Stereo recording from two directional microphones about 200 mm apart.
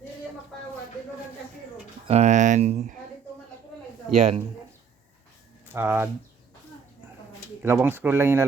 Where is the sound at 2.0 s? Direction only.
35° right (ahead or behind).